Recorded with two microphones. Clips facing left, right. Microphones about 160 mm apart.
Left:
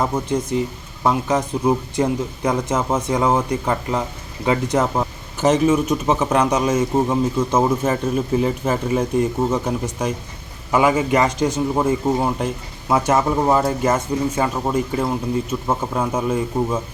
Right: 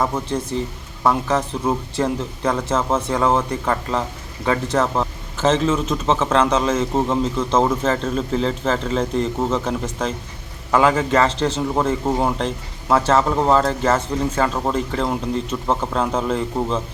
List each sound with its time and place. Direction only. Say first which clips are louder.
0.0 s a man's voice: left 1 dB; 15° left (ahead or behind)